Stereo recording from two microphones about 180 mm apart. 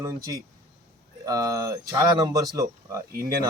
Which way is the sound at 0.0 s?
20° right (ahead or behind).